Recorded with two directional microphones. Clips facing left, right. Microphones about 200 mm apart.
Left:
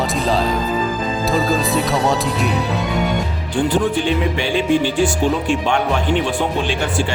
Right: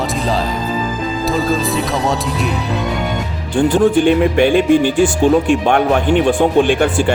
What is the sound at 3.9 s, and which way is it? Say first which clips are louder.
Speech: right 7 dB; 55° right (ahead or behind).